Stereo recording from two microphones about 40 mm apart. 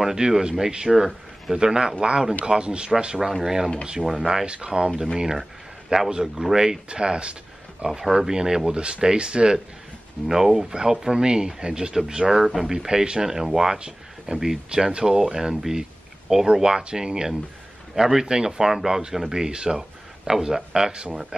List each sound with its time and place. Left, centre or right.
0.0 s speech: centre
3.4 s speech: centre
4.6 s speech: right
6.9 s speech: right
7.8 s speech: centre
10.2 s speech: centre
12.3 s speech: centre
12.7 s speech: centre
19.5 s speech: right
19.8 s speech: centre